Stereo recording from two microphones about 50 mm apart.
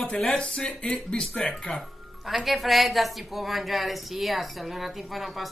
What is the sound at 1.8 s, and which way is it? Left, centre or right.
Speech, centre.